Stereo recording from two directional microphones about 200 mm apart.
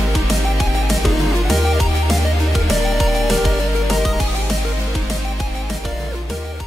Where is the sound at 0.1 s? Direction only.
Centre (ahead or behind).